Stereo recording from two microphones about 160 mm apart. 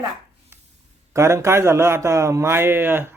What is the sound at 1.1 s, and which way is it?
Speech, 20° right (ahead or behind).